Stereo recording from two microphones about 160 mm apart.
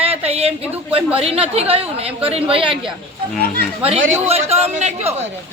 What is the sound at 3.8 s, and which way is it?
A woman's voice, 40° right (ahead or behind).